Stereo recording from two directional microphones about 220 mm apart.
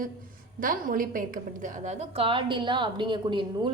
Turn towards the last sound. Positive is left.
turn(degrees=-20)  # may be behind; listen again after turning